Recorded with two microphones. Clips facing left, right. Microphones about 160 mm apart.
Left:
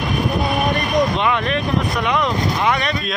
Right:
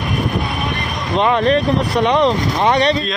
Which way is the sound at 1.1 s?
35° right (ahead or behind).